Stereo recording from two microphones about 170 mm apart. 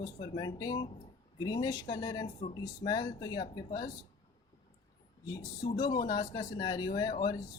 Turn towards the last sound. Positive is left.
turn(degrees=25)  # may be behind; listen again after turning